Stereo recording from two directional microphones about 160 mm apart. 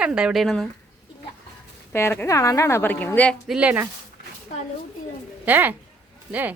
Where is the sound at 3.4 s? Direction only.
5° right (ahead or behind).